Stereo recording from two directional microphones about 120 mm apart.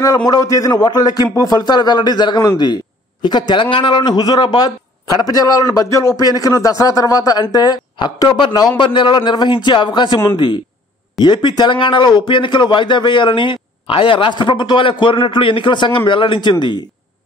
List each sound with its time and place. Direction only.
0.0 s a man's voice: 35° left (ahead or behind)